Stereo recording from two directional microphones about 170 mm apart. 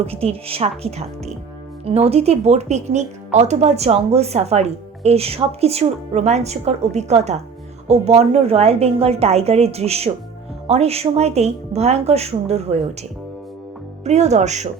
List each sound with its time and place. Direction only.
0.0 s a woman's voice: 35° right (ahead or behind)